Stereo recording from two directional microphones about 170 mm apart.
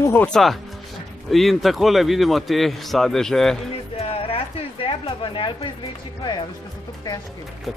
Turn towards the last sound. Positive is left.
turn(degrees=0)  # may be behind; listen again after turning